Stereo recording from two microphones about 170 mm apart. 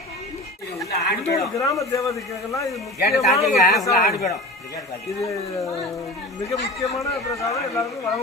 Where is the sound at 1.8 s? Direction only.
20° left (ahead or behind).